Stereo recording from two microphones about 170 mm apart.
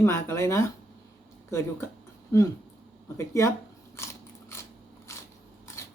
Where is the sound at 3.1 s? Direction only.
20° left (ahead or behind).